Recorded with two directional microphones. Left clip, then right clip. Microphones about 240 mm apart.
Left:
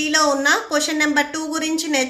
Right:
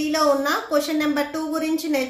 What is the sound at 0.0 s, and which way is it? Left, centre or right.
A woman's voice, left.